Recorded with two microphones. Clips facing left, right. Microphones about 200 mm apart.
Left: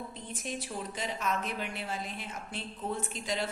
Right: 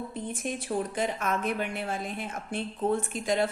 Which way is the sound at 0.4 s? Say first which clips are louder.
Right 6 dB; 55° right (ahead or behind).